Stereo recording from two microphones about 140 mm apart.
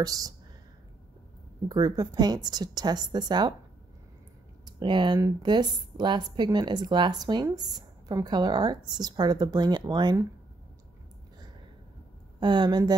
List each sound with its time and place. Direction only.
0.0 s a woman's voice: 25° right (ahead or behind)
1.7 s a woman's voice: 30° right (ahead or behind)
4.6 s speech: 35° right (ahead or behind)
12.4 s speech: 35° right (ahead or behind)